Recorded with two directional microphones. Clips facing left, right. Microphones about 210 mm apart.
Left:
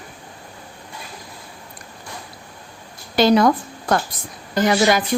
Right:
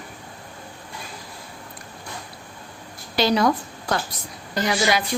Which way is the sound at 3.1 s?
50° left (ahead or behind).